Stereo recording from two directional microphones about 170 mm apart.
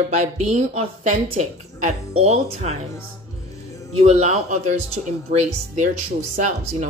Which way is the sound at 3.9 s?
40° right (ahead or behind).